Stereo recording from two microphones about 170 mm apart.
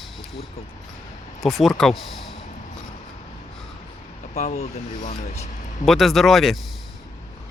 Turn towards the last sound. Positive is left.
turn(degrees=0)  # may be behind; listen again after turning